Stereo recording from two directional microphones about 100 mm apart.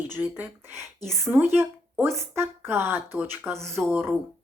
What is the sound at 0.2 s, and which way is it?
Speech, 30° right (ahead or behind).